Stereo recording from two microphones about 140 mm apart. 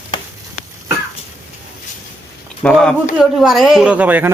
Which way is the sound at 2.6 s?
5° left (ahead or behind).